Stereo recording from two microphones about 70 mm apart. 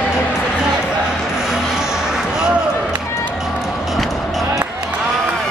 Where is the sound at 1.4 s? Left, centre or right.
Centre.